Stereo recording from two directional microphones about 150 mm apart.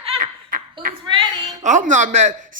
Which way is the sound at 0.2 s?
70° right (ahead or behind).